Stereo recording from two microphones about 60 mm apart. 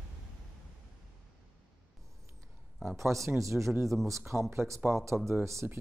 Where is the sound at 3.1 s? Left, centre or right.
Right.